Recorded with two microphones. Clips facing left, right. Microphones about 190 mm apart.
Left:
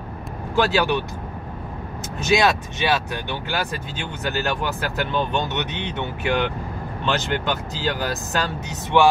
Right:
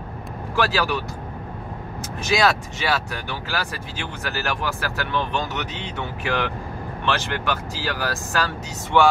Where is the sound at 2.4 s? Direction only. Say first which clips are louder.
Left 1 dB; 20° left (ahead or behind).